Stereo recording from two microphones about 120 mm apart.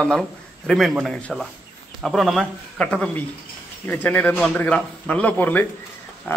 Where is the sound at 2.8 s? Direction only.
10° left (ahead or behind).